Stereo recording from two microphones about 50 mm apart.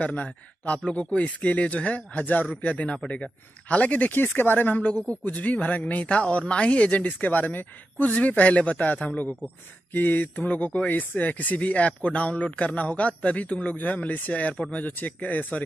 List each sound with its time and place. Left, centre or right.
0.0 s speech: left
4.1 s a man's voice: left
9.9 s a man's voice: left